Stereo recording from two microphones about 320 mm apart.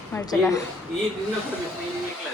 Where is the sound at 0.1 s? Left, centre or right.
Centre.